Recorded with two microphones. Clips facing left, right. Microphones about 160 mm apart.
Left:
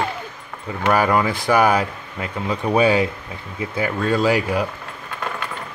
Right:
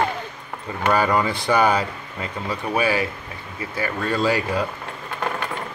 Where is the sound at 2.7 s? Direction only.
20° left (ahead or behind).